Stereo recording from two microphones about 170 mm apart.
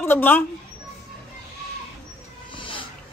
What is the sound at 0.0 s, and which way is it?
Speech, 10° left (ahead or behind).